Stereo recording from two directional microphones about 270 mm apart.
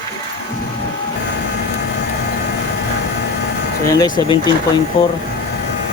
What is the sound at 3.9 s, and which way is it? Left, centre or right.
Speech, centre.